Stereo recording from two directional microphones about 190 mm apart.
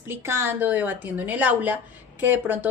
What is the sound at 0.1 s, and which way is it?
A woman's voice, 15° right (ahead or behind).